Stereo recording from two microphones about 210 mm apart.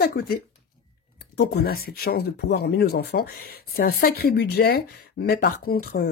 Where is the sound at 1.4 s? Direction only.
50° left (ahead or behind).